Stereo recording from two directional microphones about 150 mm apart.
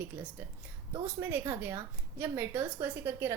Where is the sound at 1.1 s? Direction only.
15° right (ahead or behind).